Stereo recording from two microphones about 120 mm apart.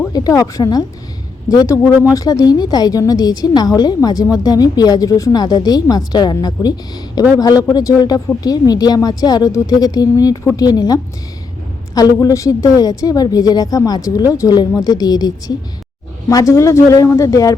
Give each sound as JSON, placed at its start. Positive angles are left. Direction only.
{"t": 0.1, "sound": "speech", "side_deg": 30}